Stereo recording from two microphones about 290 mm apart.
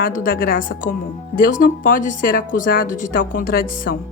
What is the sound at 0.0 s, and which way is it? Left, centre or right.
Speech, left.